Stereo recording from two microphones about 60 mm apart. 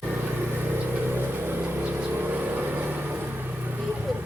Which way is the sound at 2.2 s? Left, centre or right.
Right.